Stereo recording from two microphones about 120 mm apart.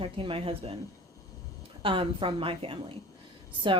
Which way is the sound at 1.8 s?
45° right (ahead or behind).